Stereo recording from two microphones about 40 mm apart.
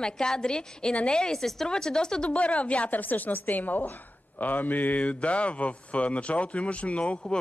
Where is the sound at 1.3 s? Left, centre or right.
Centre.